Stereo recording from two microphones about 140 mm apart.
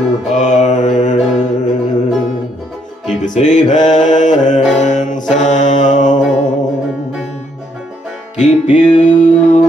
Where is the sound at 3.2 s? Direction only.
60° left (ahead or behind).